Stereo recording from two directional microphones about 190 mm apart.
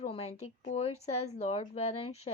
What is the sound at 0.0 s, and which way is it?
Speech, 35° left (ahead or behind).